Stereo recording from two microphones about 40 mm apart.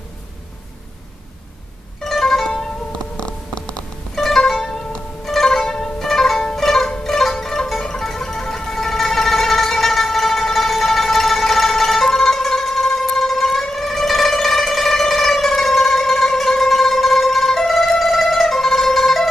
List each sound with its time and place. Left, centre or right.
2.0 s mandolin: centre
3.2 s a sound: left
4.1 s music: centre